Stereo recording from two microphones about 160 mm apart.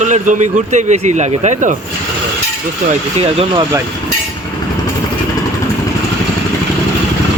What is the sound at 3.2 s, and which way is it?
Speech, 40° right (ahead or behind).